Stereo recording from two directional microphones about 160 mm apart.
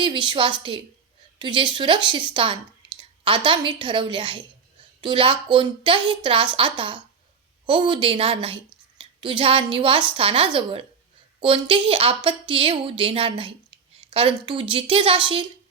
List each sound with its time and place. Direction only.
0.0 s speech: 30° right (ahead or behind)
2.8 s a sound: 25° right (ahead or behind)
3.2 s a woman's voice: 30° right (ahead or behind)